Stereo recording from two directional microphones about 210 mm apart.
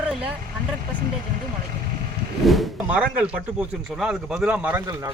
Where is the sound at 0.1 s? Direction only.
5° right (ahead or behind).